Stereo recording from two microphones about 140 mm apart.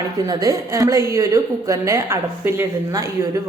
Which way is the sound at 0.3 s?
25° right (ahead or behind).